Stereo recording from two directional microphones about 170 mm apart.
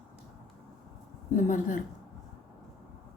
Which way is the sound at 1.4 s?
50° left (ahead or behind).